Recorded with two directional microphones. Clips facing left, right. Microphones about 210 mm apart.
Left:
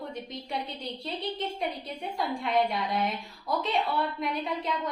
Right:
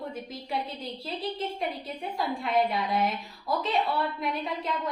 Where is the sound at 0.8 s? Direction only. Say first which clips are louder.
Right 1 dB; centre (ahead or behind).